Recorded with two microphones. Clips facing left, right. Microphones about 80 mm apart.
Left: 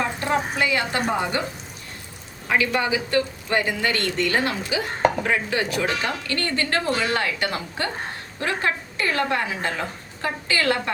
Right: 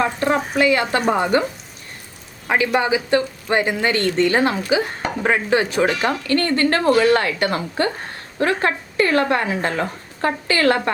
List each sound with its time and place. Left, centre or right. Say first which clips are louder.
0.5 s a woman's voice: right 6 dB; right
2.5 s speech: right 4 dB; right